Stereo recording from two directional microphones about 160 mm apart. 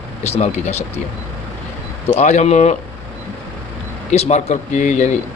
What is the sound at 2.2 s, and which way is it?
Speech, 45° left (ahead or behind).